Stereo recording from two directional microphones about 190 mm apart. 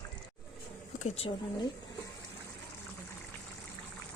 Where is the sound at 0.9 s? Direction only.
35° left (ahead or behind).